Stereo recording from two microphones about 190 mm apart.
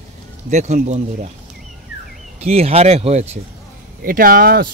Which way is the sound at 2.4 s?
35° right (ahead or behind).